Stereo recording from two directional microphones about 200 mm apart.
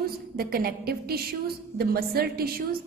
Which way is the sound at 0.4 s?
50° right (ahead or behind).